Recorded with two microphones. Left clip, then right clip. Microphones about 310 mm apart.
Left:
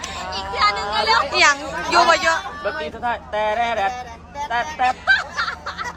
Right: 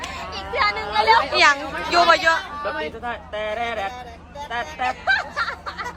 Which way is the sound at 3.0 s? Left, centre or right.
Left.